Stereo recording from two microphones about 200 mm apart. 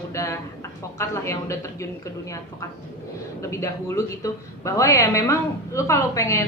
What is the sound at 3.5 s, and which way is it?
A woman's voice, 15° left (ahead or behind).